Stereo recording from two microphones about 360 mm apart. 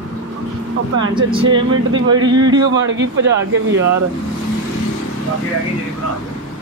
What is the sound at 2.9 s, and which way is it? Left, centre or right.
Speech, right.